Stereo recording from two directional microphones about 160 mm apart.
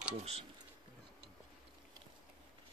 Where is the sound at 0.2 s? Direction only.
40° right (ahead or behind).